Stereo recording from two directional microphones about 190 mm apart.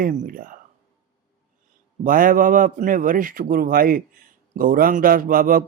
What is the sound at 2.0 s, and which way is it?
A man's voice, 45° right (ahead or behind).